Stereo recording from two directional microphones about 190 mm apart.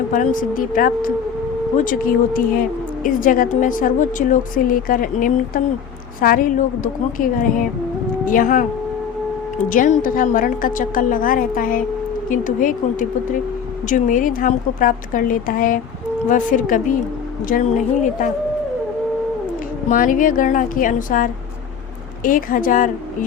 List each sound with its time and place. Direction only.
0.1 s a woman's voice: 45° left (ahead or behind)
19.9 s a woman's voice: 45° left (ahead or behind)